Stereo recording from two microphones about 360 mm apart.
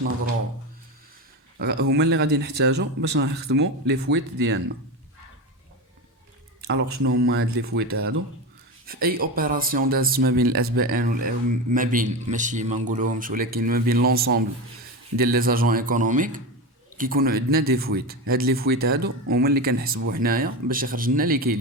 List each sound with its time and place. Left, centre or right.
1.5 s speech: right
7.0 s speech: right